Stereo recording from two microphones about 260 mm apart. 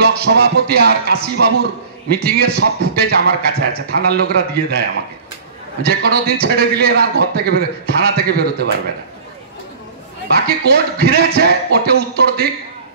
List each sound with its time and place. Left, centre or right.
0.0 s a man's voice: right
2.2 s a man's voice: right
5.9 s a man's voice: right
10.3 s a man's voice: right